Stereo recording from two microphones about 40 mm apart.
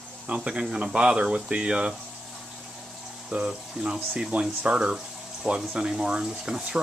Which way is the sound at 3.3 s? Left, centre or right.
Right.